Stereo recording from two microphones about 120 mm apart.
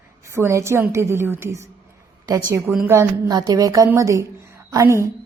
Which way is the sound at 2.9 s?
25° right (ahead or behind).